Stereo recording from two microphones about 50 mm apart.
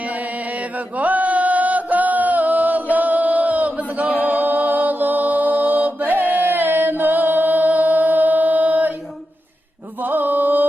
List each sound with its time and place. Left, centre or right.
0.0 s chant: right
10.0 s mantra: right